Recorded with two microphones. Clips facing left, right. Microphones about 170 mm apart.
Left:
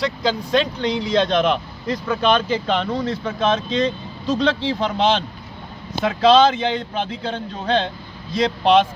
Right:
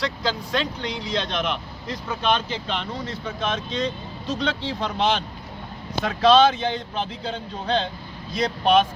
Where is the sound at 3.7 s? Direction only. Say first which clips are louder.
Left 6 dB; 90° left.